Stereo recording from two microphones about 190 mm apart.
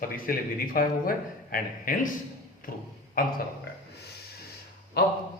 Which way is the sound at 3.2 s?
50° left (ahead or behind).